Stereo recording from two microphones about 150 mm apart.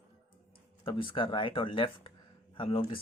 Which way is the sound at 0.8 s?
35° left (ahead or behind).